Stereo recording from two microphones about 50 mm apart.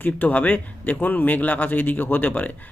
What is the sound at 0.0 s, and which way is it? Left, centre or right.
Speech, left.